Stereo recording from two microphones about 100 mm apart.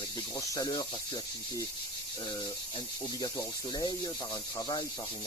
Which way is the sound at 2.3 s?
45° left (ahead or behind).